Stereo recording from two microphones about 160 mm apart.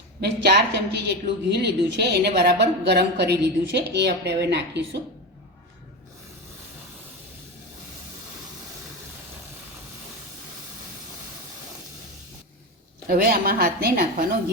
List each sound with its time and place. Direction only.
0.2 s a woman's voice: 90° right
13.1 s a woman's voice: 70° right (ahead or behind)